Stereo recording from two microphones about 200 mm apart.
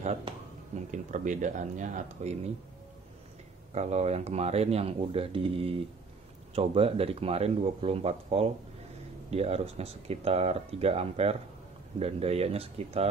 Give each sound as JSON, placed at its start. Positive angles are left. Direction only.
{"t": 0.0, "sound": "speech", "side_deg": -35}
{"t": 3.7, "sound": "speech", "side_deg": -35}